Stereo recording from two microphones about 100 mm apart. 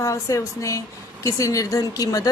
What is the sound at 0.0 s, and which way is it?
A woman's voice, 30° left (ahead or behind).